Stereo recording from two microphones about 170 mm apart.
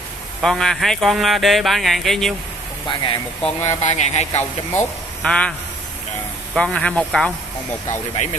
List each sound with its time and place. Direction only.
0.4 s speech: centre (ahead or behind)
2.9 s speech: 25° left (ahead or behind)
3.6 s speech: 40° left (ahead or behind)
4.4 s speech: 10° left (ahead or behind)
6.5 s speech: 5° left (ahead or behind)
8.2 s speech: 45° left (ahead or behind)